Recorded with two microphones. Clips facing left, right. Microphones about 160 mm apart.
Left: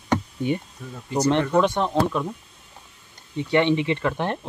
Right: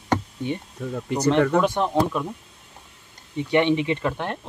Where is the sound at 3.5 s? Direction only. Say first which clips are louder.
Even; 15° right (ahead or behind).